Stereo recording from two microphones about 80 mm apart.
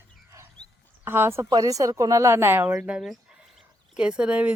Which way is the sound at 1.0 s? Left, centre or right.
Right.